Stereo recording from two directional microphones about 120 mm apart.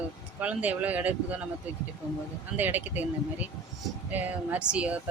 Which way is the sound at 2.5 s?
15° right (ahead or behind).